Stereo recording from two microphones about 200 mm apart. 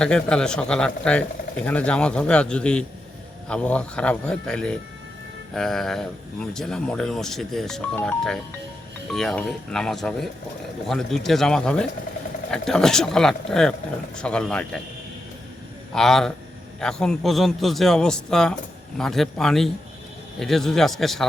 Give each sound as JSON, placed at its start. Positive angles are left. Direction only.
{"t": 0.0, "sound": "speech", "side_deg": 5}
{"t": 15.9, "sound": "speech", "side_deg": 0}